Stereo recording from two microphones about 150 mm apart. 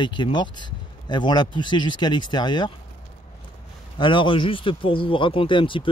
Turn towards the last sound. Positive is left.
turn(degrees=35)  # may be behind; listen again after turning